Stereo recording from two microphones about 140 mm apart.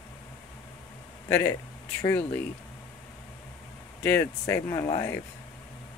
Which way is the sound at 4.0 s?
15° left (ahead or behind).